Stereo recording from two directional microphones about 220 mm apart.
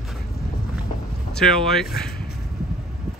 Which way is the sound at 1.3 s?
Centre (ahead or behind).